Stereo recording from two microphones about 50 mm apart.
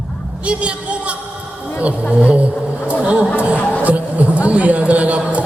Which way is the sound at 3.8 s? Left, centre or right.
Right.